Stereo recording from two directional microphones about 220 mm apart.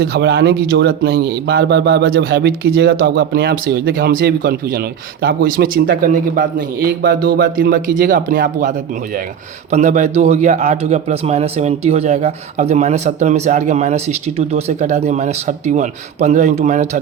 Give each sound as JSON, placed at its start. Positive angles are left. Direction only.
{"t": 0.0, "sound": "speech", "side_deg": -50}
{"t": 9.7, "sound": "a man's voice", "side_deg": -30}